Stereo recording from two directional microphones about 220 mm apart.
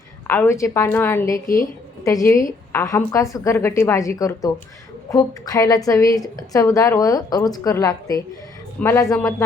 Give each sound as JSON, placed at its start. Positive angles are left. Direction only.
{"t": 0.3, "sound": "a woman's voice", "side_deg": 10}